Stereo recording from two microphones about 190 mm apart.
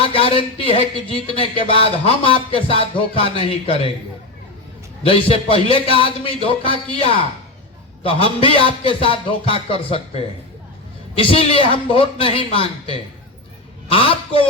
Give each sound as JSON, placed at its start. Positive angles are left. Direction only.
{"t": 0.0, "sound": "speech", "side_deg": 30}
{"t": 1.4, "sound": "music", "side_deg": 30}
{"t": 5.0, "sound": "music", "side_deg": 30}